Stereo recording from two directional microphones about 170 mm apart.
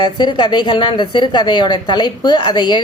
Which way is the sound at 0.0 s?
25° left (ahead or behind).